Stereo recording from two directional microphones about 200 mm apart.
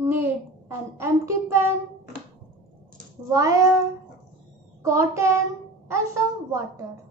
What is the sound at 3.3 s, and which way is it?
Speech, 15° right (ahead or behind).